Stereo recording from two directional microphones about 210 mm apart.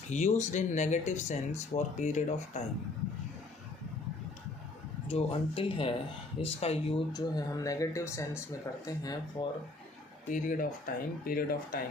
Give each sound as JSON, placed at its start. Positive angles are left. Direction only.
{"t": 0.1, "sound": "speech", "side_deg": 35}
{"t": 5.0, "sound": "speech", "side_deg": 25}
{"t": 10.3, "sound": "speech", "side_deg": 40}